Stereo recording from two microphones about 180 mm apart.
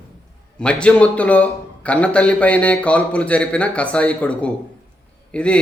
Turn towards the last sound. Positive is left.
turn(degrees=5)  # may be behind; listen again after turning